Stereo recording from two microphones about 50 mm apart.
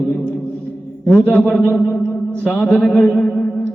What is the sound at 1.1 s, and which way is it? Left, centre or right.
Speech, left.